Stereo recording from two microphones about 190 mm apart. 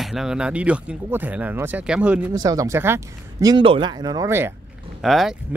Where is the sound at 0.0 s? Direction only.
Centre (ahead or behind).